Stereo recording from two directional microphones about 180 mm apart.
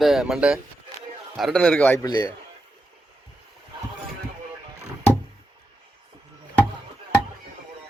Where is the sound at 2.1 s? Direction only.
20° left (ahead or behind).